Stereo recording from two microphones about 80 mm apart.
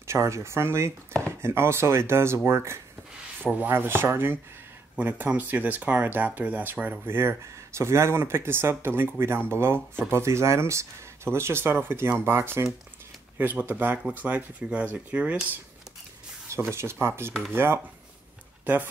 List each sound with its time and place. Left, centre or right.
0.0 s speech: right
3.4 s speech: right
13.4 s speech: right
16.4 s speech: right